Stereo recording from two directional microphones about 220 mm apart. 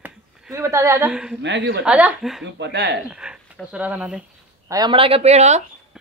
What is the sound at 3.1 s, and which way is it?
Speech, 5° right (ahead or behind).